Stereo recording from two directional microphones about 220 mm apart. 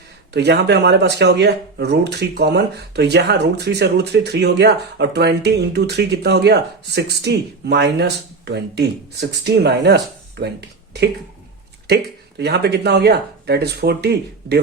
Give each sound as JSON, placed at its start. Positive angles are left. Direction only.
{"t": 0.3, "sound": "speech", "side_deg": -50}
{"t": 12.4, "sound": "speech", "side_deg": -50}